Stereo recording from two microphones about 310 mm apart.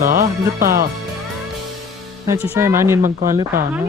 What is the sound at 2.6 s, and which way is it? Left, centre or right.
Speech, centre.